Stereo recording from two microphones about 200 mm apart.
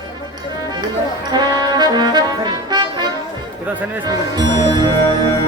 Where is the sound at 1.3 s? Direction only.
20° right (ahead or behind).